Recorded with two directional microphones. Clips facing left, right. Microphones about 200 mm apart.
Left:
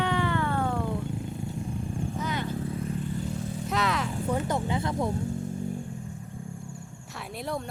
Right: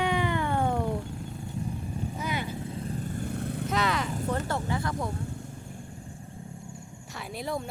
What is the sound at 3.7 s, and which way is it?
Vehicle, centre (ahead or behind).